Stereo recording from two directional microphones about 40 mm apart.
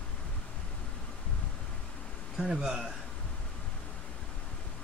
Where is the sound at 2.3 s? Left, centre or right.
Centre.